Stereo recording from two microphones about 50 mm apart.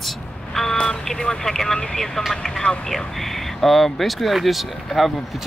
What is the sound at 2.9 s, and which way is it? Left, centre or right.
Speech, centre.